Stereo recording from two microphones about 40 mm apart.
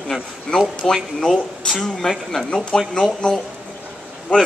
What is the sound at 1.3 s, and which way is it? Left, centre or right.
Speech, centre.